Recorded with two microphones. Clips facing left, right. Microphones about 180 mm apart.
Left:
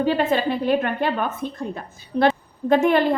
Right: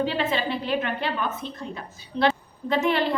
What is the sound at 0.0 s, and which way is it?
A woman's voice, 50° left (ahead or behind).